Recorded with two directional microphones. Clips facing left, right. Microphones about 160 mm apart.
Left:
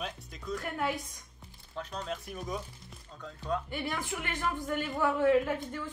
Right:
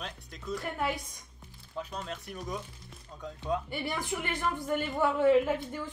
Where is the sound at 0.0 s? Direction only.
Centre (ahead or behind).